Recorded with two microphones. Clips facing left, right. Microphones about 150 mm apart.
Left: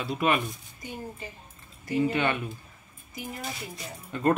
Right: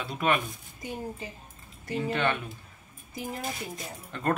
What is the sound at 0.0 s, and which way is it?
Speech, 5° left (ahead or behind).